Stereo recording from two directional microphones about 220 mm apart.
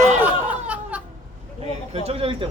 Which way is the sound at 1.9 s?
25° right (ahead or behind).